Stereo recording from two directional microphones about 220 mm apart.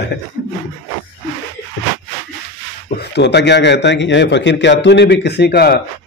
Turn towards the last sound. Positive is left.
turn(degrees=45)  # may be behind; listen again after turning